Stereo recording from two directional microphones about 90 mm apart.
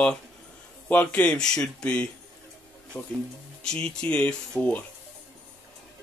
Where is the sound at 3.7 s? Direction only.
10° left (ahead or behind).